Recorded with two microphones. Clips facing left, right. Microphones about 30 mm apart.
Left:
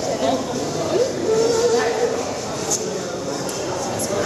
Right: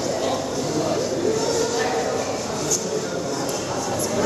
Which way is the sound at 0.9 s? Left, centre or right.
Centre.